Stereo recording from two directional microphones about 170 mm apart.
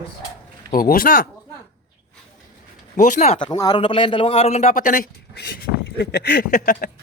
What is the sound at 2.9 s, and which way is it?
Speech, 50° left (ahead or behind).